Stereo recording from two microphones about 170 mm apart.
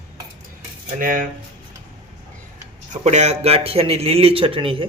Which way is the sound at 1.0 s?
55° right (ahead or behind).